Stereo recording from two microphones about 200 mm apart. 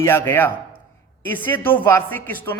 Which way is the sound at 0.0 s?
10° left (ahead or behind).